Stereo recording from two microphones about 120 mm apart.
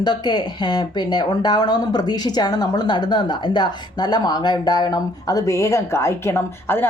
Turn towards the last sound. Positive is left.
turn(degrees=20)  # may be behind; listen again after turning